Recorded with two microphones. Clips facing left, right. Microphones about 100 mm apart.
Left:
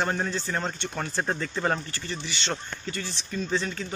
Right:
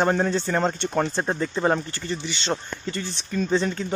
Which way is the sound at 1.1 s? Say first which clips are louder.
Right 4 dB; 20° right (ahead or behind).